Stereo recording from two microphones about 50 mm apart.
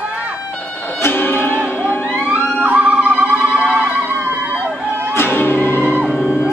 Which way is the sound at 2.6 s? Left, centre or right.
Right.